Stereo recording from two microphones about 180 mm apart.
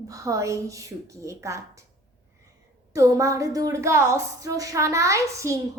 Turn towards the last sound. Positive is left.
turn(degrees=-15)  # may be behind; listen again after turning